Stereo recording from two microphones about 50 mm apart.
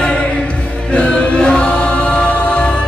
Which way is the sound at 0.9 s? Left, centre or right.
Left.